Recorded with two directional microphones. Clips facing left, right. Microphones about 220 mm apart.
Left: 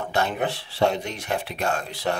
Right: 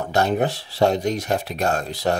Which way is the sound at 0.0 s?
40° right (ahead or behind).